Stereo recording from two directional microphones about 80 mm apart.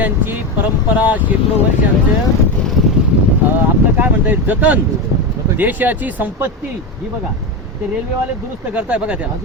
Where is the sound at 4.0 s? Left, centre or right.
Right.